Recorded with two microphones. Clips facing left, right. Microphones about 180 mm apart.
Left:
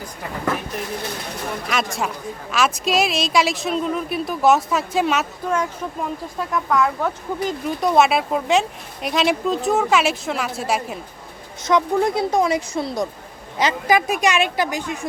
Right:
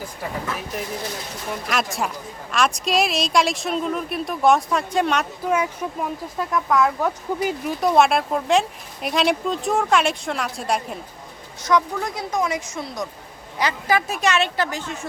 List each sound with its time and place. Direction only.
1.6 s speech: centre (ahead or behind)
5.5 s speech: 10° right (ahead or behind)
11.6 s speech: 25° left (ahead or behind)
13.6 s a woman's voice: 20° left (ahead or behind)